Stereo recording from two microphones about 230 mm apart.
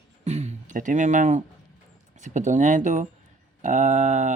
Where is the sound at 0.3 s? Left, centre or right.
Right.